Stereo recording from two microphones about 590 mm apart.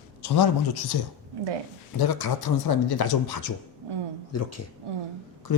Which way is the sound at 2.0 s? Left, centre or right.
Left.